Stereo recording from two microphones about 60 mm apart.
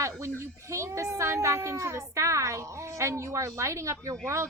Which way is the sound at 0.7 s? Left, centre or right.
Right.